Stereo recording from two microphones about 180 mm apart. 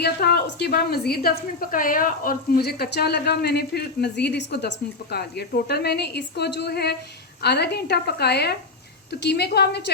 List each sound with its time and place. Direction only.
0.0 s a woman's voice: 65° left (ahead or behind)